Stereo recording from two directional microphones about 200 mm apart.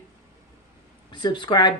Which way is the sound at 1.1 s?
25° left (ahead or behind).